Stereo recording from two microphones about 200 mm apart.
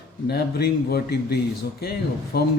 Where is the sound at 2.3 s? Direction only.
50° left (ahead or behind).